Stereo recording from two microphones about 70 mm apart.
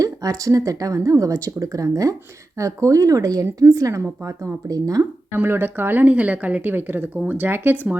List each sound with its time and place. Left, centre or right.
0.0 s speech: right
5.3 s a woman's voice: right